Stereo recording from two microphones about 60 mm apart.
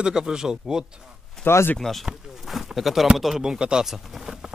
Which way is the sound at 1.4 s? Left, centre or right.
Left.